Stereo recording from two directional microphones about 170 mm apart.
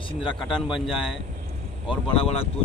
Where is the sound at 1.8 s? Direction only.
35° left (ahead or behind).